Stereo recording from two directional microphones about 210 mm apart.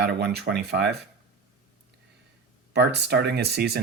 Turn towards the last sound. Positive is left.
turn(degrees=-50)  # may be behind; listen again after turning